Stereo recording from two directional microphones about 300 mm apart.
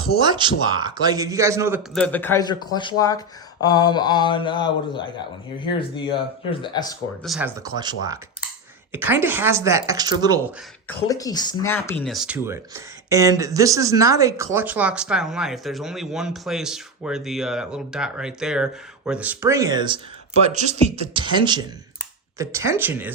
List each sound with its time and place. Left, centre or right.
0.2 s a man's voice: centre
2.0 s speech: centre
7.2 s a man's voice: centre
10.8 s a man's voice: centre